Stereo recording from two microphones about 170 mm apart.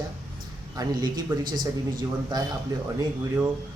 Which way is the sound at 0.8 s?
25° right (ahead or behind).